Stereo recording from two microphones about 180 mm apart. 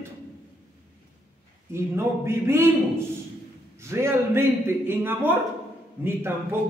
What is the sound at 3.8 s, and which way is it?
A man's voice, 15° right (ahead or behind).